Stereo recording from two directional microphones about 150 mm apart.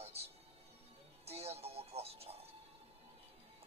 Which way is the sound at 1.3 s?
45° right (ahead or behind).